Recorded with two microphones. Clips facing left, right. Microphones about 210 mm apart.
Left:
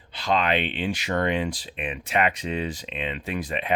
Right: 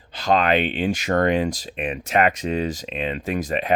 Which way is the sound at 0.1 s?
45° right (ahead or behind).